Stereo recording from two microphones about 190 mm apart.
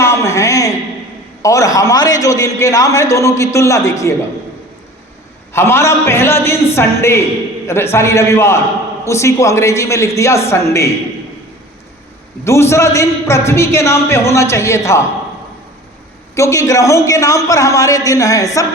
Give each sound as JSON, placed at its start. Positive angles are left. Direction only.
{"t": 0.0, "sound": "a sound", "side_deg": 15}
{"t": 1.4, "sound": "a man's voice", "side_deg": 15}
{"t": 5.5, "sound": "a man's voice", "side_deg": 15}
{"t": 12.5, "sound": "a man's voice", "side_deg": 15}
{"t": 16.3, "sound": "a man's voice", "side_deg": 15}